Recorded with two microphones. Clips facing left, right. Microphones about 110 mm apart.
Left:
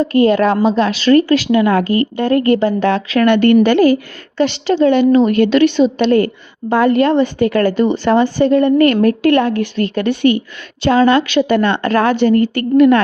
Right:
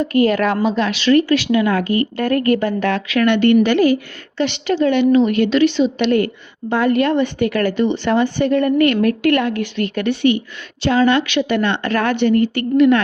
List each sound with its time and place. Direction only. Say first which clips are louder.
0.0 s a woman's voice: left 4 dB; 30° left (ahead or behind)
2.1 s a woman's voice: left 4 dB; 25° left (ahead or behind)
5.5 s a woman's voice: left 3 dB; 55° left (ahead or behind)
6.0 s a woman's voice: left 4 dB; 35° left (ahead or behind)
10.1 s a woman's voice: left 1 dB; 45° left (ahead or behind)